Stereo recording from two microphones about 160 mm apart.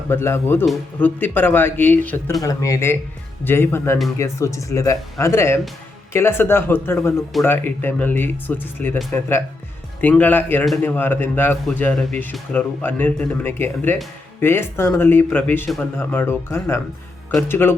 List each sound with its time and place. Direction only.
0.1 s speech: 15° left (ahead or behind)
10.0 s speech: 10° left (ahead or behind)